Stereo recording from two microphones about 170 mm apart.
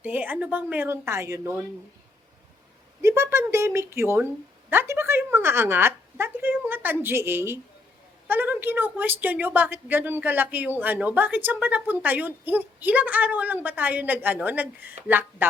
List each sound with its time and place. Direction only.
0.0 s a woman's voice: 10° right (ahead or behind)
3.0 s a woman's voice: 15° right (ahead or behind)